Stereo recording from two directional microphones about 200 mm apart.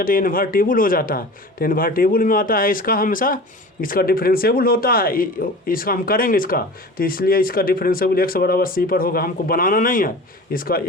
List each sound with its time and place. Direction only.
0.0 s a man's voice: 45° left (ahead or behind)